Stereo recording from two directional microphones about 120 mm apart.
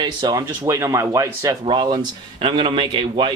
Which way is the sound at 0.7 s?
25° right (ahead or behind).